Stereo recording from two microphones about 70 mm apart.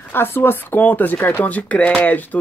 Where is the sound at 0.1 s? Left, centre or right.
Left.